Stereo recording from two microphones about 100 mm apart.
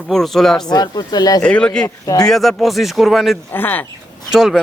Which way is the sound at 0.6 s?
45° left (ahead or behind).